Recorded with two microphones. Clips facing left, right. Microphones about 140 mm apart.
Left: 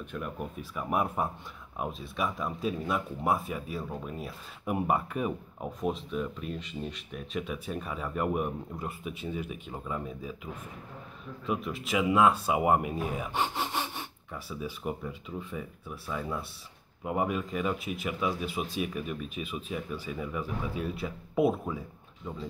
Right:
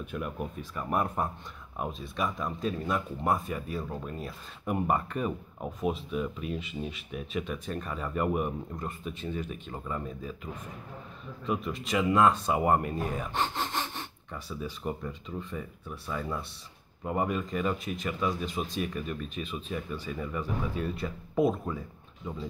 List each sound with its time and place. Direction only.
0.0 s speech: 5° right (ahead or behind)
0.6 s speech: 5° left (ahead or behind)